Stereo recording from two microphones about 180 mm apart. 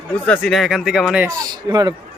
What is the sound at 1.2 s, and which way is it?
Speech, 20° right (ahead or behind).